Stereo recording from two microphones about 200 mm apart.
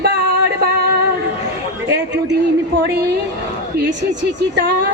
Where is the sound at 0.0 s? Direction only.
55° right (ahead or behind).